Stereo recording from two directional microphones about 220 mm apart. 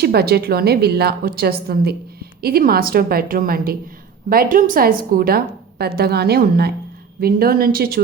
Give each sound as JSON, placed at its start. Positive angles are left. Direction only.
{"t": 0.0, "sound": "a woman's voice", "side_deg": -45}